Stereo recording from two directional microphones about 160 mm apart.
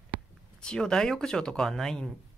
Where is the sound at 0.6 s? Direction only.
5° left (ahead or behind).